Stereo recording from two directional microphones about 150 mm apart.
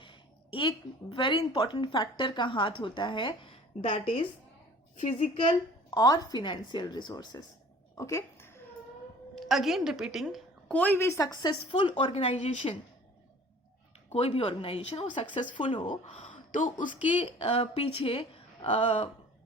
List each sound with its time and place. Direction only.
0.0 s a sound: 35° left (ahead or behind)
1.1 s speech: 35° left (ahead or behind)
5.5 s a woman's voice: 30° left (ahead or behind)
7.9 s a sound: 20° left (ahead or behind)
9.3 s a woman's voice: centre (ahead or behind)
10.7 s a woman's voice: 10° left (ahead or behind)
11.5 s speech: 35° left (ahead or behind)
14.1 s speech: 40° left (ahead or behind)
16.0 s speech: 50° left (ahead or behind)
17.1 s speech: 35° left (ahead or behind)